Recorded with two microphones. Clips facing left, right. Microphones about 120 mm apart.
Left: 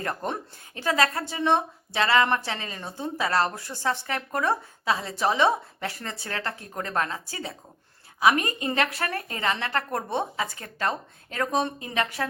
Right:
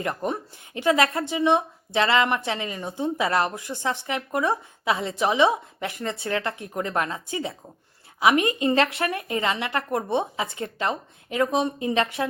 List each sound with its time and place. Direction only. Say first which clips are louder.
0.0 s a woman's voice: right 3 dB; 15° right (ahead or behind)
1.4 s a woman's voice: right 2 dB; 15° right (ahead or behind)